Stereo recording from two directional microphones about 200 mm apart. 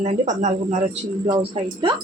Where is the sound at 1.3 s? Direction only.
25° right (ahead or behind).